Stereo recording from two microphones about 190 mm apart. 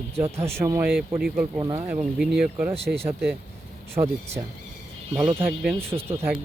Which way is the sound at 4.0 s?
30° right (ahead or behind).